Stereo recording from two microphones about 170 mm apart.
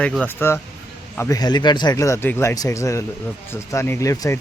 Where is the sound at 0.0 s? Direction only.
10° left (ahead or behind).